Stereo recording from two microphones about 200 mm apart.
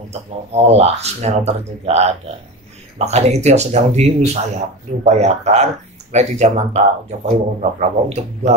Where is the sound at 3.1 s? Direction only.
35° right (ahead or behind).